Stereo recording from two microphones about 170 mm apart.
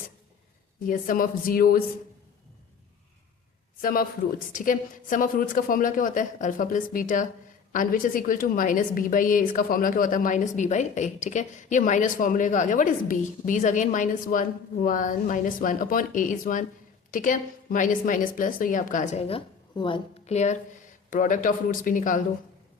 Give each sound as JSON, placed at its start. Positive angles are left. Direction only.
{"t": 0.9, "sound": "speech", "side_deg": 55}
{"t": 3.8, "sound": "a man's voice", "side_deg": 55}
{"t": 19.7, "sound": "a woman's voice", "side_deg": 30}
{"t": 20.3, "sound": "a woman's voice", "side_deg": 45}